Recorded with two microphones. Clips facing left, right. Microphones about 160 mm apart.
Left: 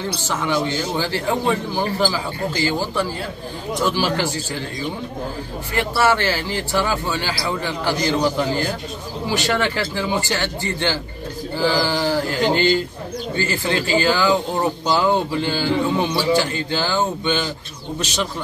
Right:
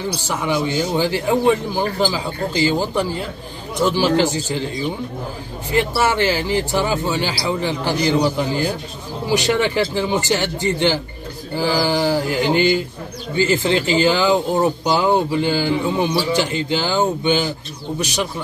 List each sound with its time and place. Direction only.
0.3 s speech: 15° right (ahead or behind)
5.7 s speech: 20° right (ahead or behind)